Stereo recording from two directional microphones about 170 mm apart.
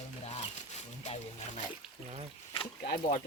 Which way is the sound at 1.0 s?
40° left (ahead or behind).